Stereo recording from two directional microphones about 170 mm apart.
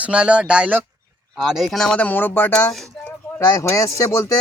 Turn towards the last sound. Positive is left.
turn(degrees=20)  # may be behind; listen again after turning